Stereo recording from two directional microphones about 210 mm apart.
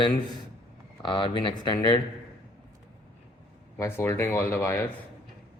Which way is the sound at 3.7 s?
10° left (ahead or behind).